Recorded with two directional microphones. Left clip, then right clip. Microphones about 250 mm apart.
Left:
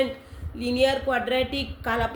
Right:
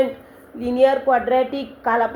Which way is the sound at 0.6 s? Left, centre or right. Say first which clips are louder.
Right 6 dB; left.